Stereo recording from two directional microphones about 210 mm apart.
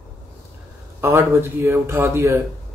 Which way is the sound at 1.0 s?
10° right (ahead or behind).